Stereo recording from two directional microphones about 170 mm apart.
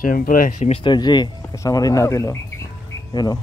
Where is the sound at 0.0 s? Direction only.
55° left (ahead or behind).